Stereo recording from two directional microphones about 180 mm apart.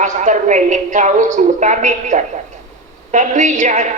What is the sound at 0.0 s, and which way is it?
A woman's voice, 40° right (ahead or behind).